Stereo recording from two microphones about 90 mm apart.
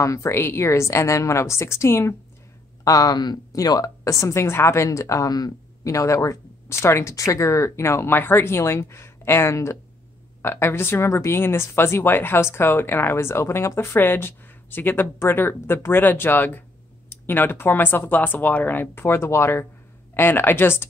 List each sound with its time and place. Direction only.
0.0 s a woman's voice: 35° left (ahead or behind)
2.8 s a woman's voice: 40° left (ahead or behind); by 20.9 s 25° left (ahead or behind)